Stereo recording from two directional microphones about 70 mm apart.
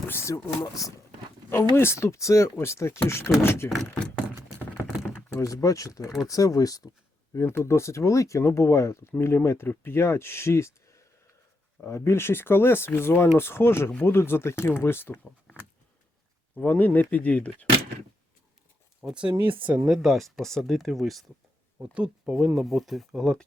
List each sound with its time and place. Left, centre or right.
0.1 s speech: left
0.6 s speech: left
1.7 s speech: left
3.9 s a sound: centre
5.3 s speech: left
7.3 s speech: left
16.6 s speech: left
19.0 s speech: centre
19.9 s speech: centre
21.9 s speech: centre
22.5 s speech: centre